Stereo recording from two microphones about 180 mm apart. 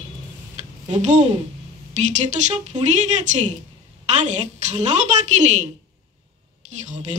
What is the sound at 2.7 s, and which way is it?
A woman's voice, 40° right (ahead or behind).